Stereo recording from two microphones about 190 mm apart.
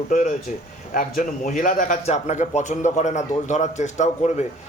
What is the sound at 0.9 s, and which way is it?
A man's voice, 45° left (ahead or behind).